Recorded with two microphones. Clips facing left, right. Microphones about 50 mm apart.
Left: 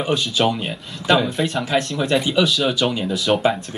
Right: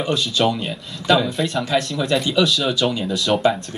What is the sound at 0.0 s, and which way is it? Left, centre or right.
Speech, centre.